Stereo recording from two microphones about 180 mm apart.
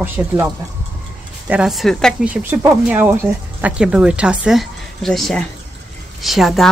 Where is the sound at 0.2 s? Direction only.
15° right (ahead or behind).